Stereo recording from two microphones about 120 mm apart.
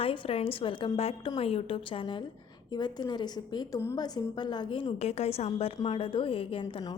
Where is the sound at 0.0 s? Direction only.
50° left (ahead or behind).